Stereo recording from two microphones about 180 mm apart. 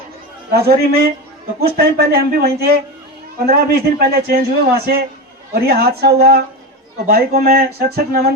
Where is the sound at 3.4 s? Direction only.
60° right (ahead or behind).